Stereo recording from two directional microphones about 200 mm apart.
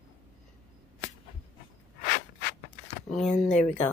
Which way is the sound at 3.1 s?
Centre (ahead or behind).